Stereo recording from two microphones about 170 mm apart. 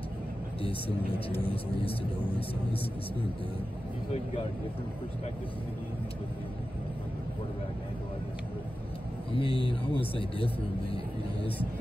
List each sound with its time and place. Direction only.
0.6 s a man's voice: 35° left (ahead or behind)
9.4 s a man's voice: 30° left (ahead or behind)